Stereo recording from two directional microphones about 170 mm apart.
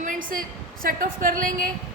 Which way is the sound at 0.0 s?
50° right (ahead or behind).